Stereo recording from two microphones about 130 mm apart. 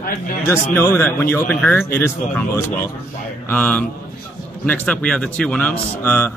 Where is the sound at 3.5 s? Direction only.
15° left (ahead or behind).